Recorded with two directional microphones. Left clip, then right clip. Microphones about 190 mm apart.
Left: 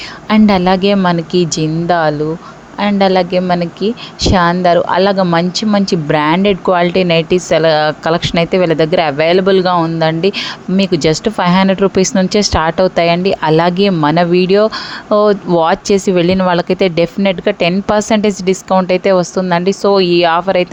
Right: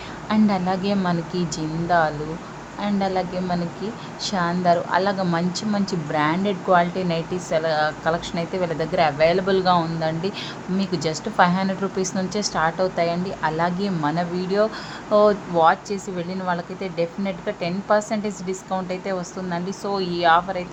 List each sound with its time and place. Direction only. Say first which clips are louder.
0.3 s a woman's voice: left 11 dB; 45° left (ahead or behind)
15.6 s speech: left 4 dB; 50° left (ahead or behind)